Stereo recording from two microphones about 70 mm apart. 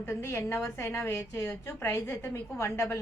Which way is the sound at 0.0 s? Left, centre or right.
Left.